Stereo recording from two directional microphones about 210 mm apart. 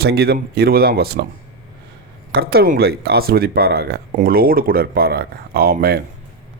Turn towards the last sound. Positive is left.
turn(degrees=-45)  # may be behind; listen again after turning